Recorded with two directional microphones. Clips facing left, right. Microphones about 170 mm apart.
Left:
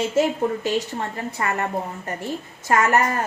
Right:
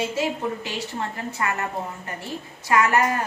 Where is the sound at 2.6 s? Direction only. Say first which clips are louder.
Left 1 dB; 45° left (ahead or behind).